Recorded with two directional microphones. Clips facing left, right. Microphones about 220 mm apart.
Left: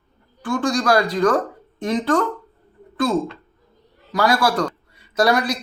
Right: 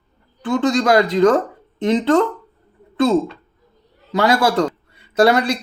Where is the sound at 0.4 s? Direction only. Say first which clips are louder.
Right 3 dB; 20° right (ahead or behind).